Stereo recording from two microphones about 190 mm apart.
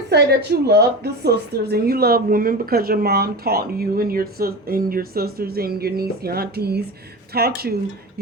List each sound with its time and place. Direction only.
0.1 s a woman's voice: 60° right (ahead or behind)